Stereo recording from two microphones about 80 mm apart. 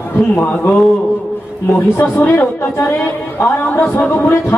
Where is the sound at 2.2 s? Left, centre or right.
Left.